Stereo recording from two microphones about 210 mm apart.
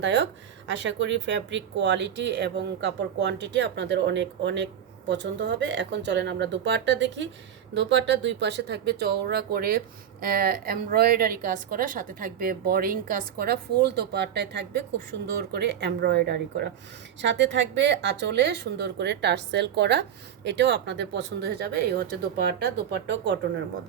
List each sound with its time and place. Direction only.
0.0 s speech: 55° right (ahead or behind)